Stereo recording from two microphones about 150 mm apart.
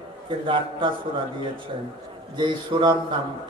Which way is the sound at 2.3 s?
30° right (ahead or behind).